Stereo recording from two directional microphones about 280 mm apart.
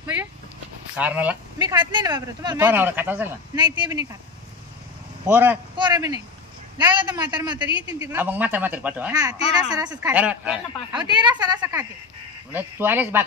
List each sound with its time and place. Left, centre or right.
0.0 s a sound: centre
0.9 s speech: centre
5.2 s speech: centre
10.9 s speech: centre